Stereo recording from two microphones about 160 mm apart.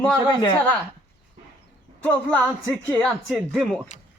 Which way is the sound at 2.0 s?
10° left (ahead or behind).